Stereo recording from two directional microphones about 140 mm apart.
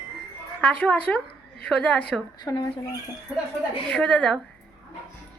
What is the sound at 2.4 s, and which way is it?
Speech, 30° left (ahead or behind).